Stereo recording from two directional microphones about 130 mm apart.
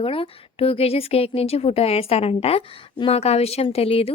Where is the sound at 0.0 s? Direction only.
45° left (ahead or behind).